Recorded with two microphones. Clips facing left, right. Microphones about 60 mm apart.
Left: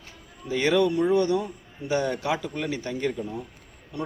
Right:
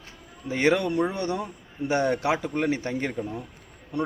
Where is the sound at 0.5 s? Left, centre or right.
Right.